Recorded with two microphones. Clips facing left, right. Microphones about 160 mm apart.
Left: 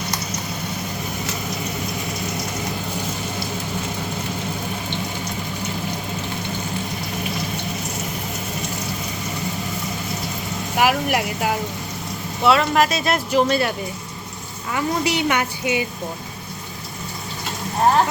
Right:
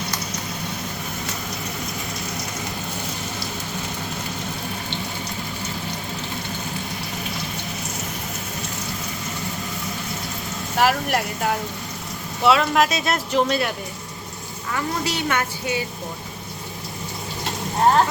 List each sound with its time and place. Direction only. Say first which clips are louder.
10.8 s a woman's voice: left 1 dB; 10° left (ahead or behind)
14.7 s a woman's voice: left 4 dB; 15° left (ahead or behind)